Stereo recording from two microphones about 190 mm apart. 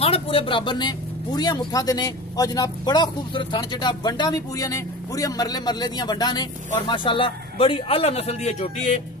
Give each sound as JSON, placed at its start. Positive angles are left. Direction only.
{"t": 0.0, "sound": "speech", "side_deg": 30}